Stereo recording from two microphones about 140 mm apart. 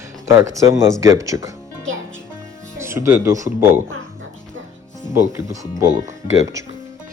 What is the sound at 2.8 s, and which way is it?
Speech, 20° right (ahead or behind).